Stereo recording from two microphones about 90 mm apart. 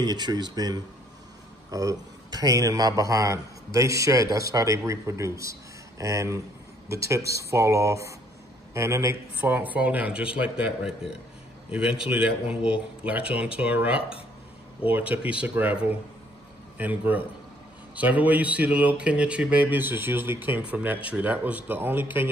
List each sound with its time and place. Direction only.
0.0 s a man's voice: 50° right (ahead or behind); by 9.2 s 35° right (ahead or behind)
9.4 s a man's voice: 20° right (ahead or behind)